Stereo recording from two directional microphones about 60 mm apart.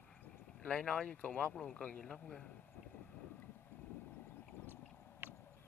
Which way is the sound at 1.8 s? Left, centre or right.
Left.